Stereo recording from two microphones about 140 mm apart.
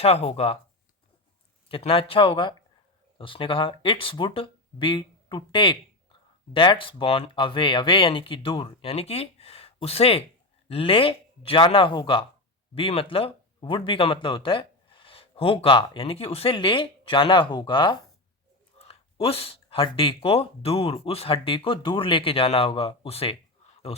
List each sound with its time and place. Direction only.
0.0 s speech: 45° left (ahead or behind)
1.6 s speech: 40° left (ahead or behind)